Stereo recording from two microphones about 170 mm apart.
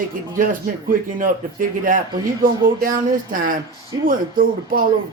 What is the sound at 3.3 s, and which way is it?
Speech, 50° right (ahead or behind).